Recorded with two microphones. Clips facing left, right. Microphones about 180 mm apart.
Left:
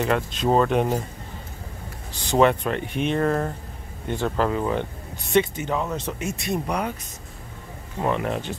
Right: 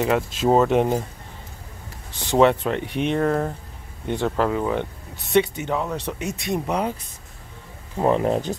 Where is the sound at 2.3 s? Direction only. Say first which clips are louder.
Right 2 dB; 20° right (ahead or behind).